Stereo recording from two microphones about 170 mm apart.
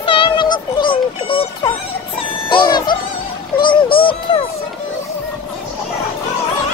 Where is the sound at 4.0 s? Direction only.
30° left (ahead or behind).